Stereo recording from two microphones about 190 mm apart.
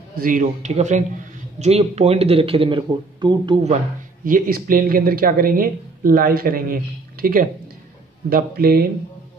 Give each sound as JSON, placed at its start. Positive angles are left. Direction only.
{"t": 0.2, "sound": "speech", "side_deg": -45}
{"t": 4.2, "sound": "speech", "side_deg": -50}